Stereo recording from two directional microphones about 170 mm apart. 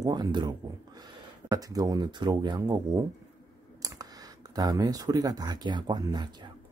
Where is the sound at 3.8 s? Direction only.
20° right (ahead or behind).